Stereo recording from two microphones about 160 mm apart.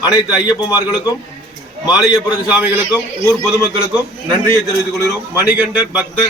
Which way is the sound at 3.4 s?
25° right (ahead or behind).